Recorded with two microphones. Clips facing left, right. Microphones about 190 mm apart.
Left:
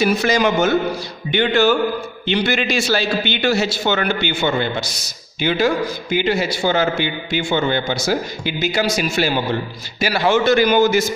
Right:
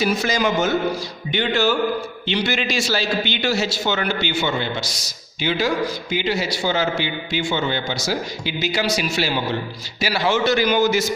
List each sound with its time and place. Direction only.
0.0 s a man's voice: 60° left (ahead or behind)